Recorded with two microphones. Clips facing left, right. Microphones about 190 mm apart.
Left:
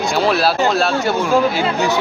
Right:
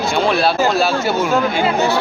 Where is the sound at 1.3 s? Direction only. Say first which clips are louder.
Left 1 dB; 10° left (ahead or behind).